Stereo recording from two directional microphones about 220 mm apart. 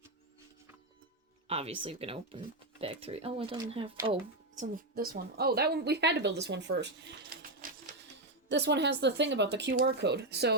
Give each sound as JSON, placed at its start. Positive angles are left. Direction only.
{"t": 1.5, "sound": "speech", "side_deg": -25}
{"t": 4.5, "sound": "a woman's voice", "side_deg": -40}